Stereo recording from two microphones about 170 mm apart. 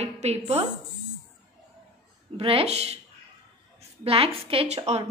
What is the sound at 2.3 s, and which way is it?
Speech, 35° right (ahead or behind).